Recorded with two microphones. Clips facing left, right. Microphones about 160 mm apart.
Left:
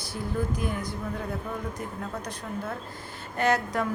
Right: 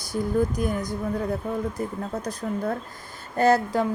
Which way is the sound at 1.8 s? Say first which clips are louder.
Right 5 dB; 35° right (ahead or behind).